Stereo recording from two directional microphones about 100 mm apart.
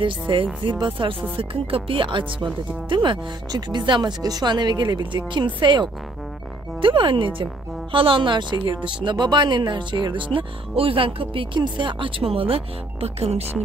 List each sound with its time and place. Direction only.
0.0 s a woman's voice: 60° right (ahead or behind); by 13.5 s 90° right